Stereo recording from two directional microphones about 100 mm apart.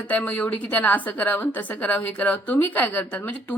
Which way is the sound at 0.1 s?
15° left (ahead or behind).